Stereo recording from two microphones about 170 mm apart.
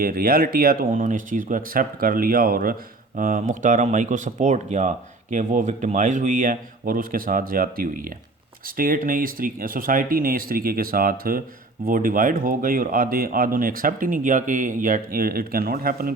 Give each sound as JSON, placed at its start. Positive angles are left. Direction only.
{"t": 0.0, "sound": "speech", "side_deg": -60}